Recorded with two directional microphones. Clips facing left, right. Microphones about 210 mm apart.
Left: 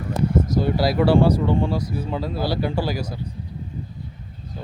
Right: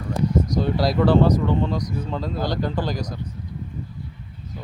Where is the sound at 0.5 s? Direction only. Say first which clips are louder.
Left 1 dB; 5° left (ahead or behind).